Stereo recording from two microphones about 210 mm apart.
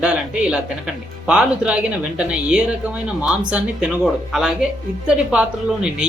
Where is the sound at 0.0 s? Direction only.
5° right (ahead or behind).